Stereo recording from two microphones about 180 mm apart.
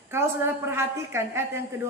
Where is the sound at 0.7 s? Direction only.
15° right (ahead or behind).